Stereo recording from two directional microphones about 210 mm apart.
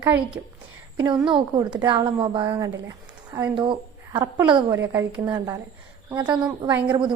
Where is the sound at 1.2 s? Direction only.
25° right (ahead or behind).